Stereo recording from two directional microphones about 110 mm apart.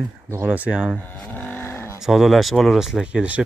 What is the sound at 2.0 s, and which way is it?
Speech, 5° right (ahead or behind).